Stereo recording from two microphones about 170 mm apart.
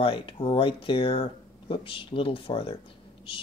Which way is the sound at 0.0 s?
30° left (ahead or behind).